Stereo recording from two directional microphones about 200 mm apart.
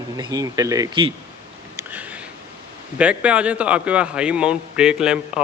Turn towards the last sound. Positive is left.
turn(degrees=-5)  # may be behind; listen again after turning